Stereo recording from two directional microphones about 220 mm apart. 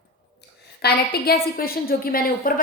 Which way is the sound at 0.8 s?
45° left (ahead or behind).